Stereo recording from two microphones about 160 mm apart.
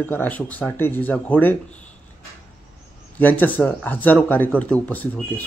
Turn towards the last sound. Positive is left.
turn(degrees=10)  # may be behind; listen again after turning